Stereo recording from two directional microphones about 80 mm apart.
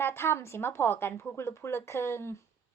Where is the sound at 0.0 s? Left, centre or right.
Left.